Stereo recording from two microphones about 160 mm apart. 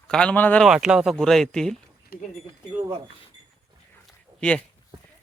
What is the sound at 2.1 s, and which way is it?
Speech, 75° left (ahead or behind).